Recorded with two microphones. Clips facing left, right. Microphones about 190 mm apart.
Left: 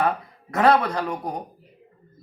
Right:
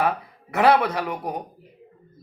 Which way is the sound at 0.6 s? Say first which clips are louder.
Even; 10° right (ahead or behind).